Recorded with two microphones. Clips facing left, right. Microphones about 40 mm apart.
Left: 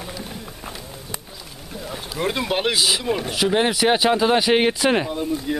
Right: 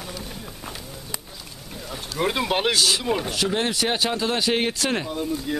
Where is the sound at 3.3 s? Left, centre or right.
Centre.